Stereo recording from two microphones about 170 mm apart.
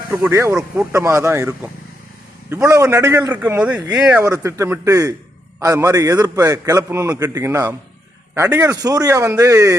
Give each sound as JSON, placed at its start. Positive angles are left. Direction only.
{"t": 0.2, "sound": "a man's voice", "side_deg": -15}